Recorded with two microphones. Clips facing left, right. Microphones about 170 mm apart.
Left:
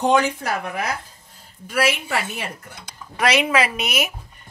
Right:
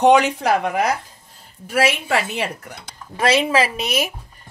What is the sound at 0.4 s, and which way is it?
Speech, 75° right (ahead or behind).